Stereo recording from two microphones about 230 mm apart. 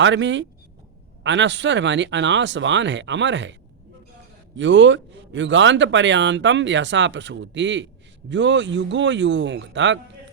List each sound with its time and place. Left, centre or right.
0.0 s a man's voice: right
4.5 s a man's voice: right